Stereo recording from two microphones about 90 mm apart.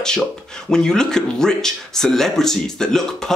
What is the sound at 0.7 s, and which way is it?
Speech, 5° left (ahead or behind).